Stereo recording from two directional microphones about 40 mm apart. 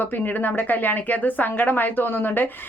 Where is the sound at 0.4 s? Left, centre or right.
Left.